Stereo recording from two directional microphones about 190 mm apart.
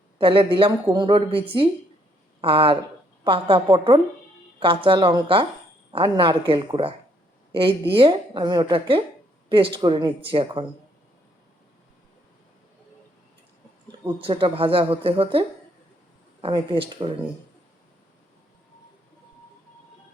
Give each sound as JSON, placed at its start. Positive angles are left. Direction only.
{"t": 0.2, "sound": "a woman's voice", "side_deg": -25}
{"t": 14.0, "sound": "a woman's voice", "side_deg": -25}